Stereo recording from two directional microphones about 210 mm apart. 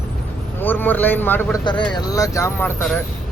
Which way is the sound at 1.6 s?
20° left (ahead or behind).